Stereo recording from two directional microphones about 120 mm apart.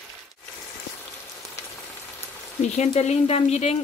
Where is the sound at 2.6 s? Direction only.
70° left (ahead or behind).